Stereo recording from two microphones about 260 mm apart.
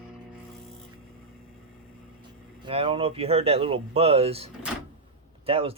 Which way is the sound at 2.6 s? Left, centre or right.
Centre.